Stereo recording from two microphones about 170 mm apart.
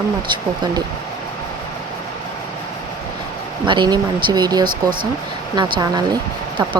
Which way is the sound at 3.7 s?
25° right (ahead or behind).